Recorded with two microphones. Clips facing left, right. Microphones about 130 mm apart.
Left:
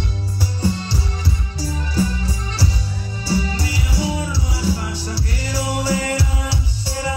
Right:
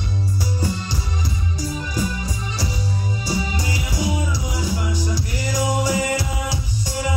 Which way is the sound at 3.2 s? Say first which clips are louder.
Left 5 dB; 15° right (ahead or behind).